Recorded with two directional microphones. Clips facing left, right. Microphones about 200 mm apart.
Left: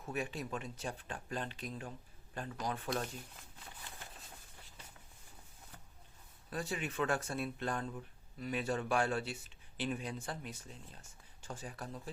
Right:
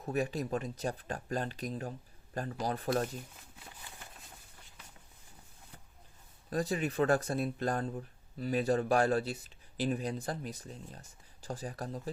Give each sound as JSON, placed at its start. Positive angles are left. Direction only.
{"t": 0.0, "sound": "speech", "side_deg": -40}
{"t": 6.5, "sound": "speech", "side_deg": -40}